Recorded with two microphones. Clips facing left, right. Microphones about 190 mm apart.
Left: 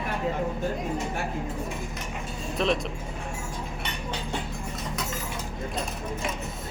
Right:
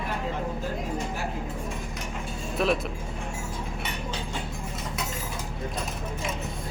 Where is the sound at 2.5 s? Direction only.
5° right (ahead or behind).